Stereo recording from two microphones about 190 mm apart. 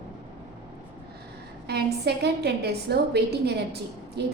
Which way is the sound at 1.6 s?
60° right (ahead or behind).